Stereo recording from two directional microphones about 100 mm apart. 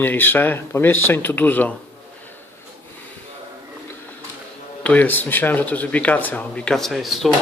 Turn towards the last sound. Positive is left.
turn(degrees=0)  # may be behind; listen again after turning